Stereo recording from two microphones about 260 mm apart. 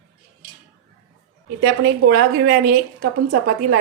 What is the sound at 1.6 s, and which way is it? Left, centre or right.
A woman's voice, right.